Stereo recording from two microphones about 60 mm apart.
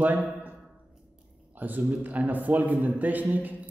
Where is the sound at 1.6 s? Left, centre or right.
Right.